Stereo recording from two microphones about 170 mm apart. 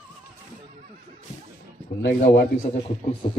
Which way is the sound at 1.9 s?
60° left (ahead or behind).